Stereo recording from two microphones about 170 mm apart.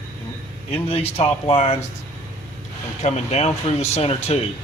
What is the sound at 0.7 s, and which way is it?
Speech, 35° left (ahead or behind).